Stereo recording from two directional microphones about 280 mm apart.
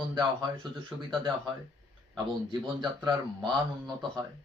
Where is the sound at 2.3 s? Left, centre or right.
Centre.